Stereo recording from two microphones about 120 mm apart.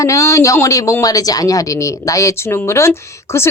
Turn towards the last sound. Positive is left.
turn(degrees=20)  # may be behind; listen again after turning